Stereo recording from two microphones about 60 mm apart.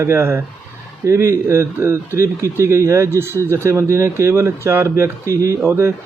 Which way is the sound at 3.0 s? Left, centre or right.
Right.